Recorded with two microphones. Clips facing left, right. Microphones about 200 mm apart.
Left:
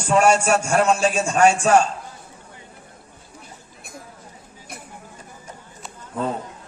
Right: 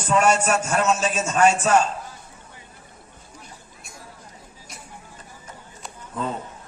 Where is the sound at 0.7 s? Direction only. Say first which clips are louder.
Left 5 dB; 30° left (ahead or behind).